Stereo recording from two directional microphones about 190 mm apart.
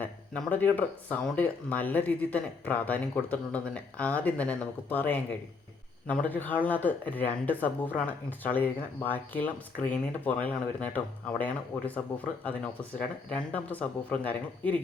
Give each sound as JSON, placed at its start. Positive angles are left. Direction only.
{"t": 0.0, "sound": "speech", "side_deg": 10}